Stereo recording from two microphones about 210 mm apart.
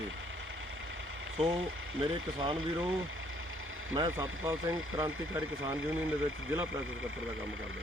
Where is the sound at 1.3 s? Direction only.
25° right (ahead or behind).